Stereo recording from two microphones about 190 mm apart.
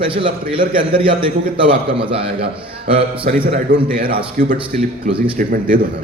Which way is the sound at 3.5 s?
50° right (ahead or behind).